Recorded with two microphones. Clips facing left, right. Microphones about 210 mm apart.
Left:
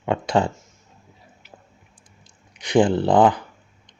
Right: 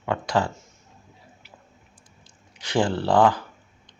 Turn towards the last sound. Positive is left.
turn(degrees=20)  # may be behind; listen again after turning